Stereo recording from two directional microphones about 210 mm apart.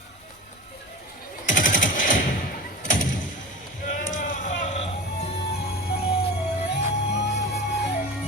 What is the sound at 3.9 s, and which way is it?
Bleat, 40° left (ahead or behind).